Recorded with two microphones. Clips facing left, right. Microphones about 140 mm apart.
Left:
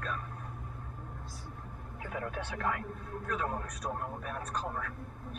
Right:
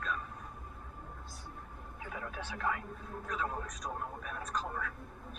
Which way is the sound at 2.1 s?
50° left (ahead or behind).